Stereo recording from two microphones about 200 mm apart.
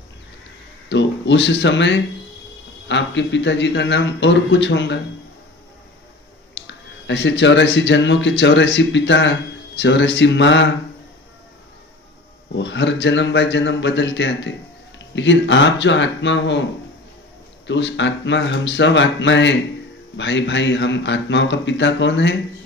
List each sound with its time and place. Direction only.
0.8 s a man's voice: 65° left (ahead or behind)
6.5 s speech: 65° left (ahead or behind)
12.5 s a man's voice: 65° left (ahead or behind)
17.6 s a man's voice: 65° left (ahead or behind)